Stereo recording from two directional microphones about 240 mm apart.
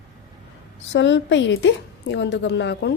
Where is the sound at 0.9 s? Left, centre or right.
Left.